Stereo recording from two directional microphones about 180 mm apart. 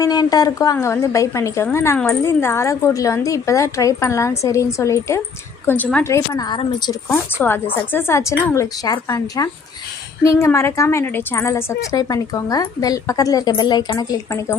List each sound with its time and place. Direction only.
0.0 s a woman's voice: 20° left (ahead or behind)
7.4 s a woman's voice: 5° left (ahead or behind)